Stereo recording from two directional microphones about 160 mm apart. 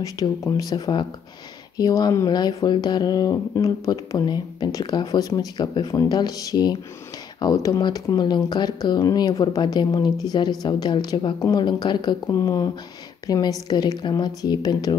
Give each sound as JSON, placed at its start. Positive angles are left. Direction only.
{"t": 0.0, "sound": "speech", "side_deg": 20}